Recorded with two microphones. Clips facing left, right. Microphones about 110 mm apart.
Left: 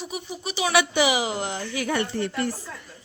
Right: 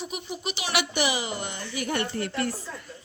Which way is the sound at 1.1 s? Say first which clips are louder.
Left 5 dB; 90° left.